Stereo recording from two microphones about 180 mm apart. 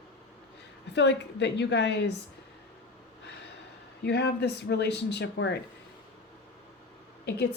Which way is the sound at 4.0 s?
65° left (ahead or behind).